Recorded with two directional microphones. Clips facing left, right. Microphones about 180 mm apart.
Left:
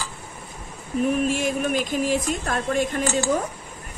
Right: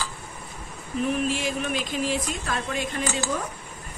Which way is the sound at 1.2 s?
50° left (ahead or behind).